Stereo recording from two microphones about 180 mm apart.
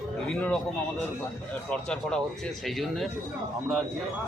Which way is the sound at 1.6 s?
5° left (ahead or behind).